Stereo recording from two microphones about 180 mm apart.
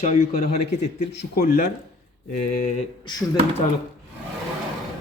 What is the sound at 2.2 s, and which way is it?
Speech, 45° left (ahead or behind).